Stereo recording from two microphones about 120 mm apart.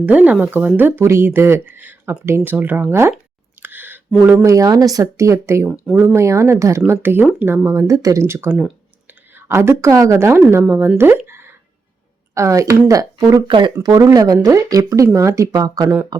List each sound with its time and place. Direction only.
0.0 s speech: 10° right (ahead or behind)
3.6 s a sound: 15° right (ahead or behind)
4.4 s a woman's voice: 30° right (ahead or behind)
8.4 s speech: 5° right (ahead or behind)
9.3 s a woman's voice: 20° right (ahead or behind)
11.3 s a sound: 20° right (ahead or behind)
12.3 s a woman's voice: 25° right (ahead or behind)
13.5 s speech: 40° right (ahead or behind)
13.8 s a woman's voice: 30° right (ahead or behind)